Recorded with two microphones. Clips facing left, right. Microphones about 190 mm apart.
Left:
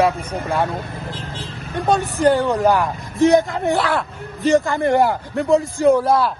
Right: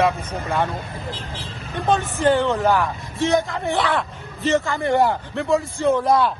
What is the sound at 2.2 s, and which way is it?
Speech, 15° left (ahead or behind).